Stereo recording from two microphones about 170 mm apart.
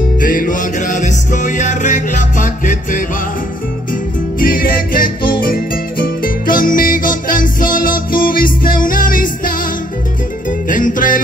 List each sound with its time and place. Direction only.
0.2 s music: 50° left (ahead or behind)
4.4 s music: 55° left (ahead or behind)
10.7 s music: 50° left (ahead or behind)